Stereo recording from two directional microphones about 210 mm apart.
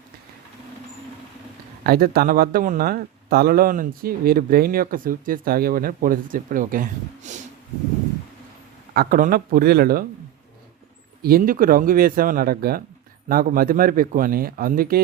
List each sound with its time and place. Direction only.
1.8 s speech: 45° right (ahead or behind)
8.9 s speech: 45° right (ahead or behind)
11.2 s speech: 45° right (ahead or behind)